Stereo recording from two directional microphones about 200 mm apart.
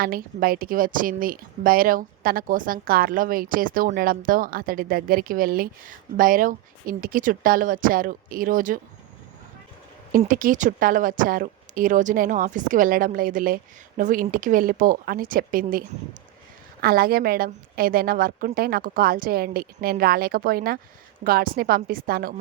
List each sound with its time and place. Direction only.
0.0 s a woman's voice: 45° right (ahead or behind)
10.1 s a woman's voice: 45° right (ahead or behind)
16.8 s a woman's voice: 50° right (ahead or behind)